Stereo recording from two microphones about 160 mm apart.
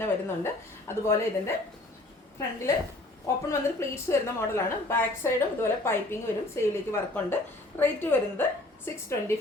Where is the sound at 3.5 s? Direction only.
15° left (ahead or behind).